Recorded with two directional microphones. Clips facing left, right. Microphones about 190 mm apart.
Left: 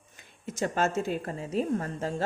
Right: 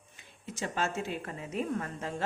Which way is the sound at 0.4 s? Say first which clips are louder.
Left 6 dB; 45° left (ahead or behind).